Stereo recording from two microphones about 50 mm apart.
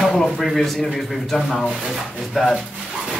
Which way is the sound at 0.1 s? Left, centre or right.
Centre.